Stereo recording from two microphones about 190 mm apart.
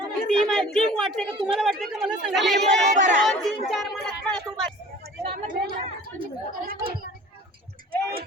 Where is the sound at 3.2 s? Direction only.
Centre (ahead or behind).